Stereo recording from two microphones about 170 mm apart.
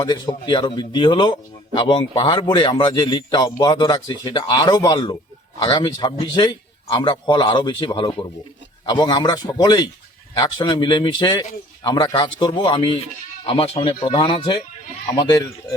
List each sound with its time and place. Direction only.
0.0 s speech: 25° left (ahead or behind)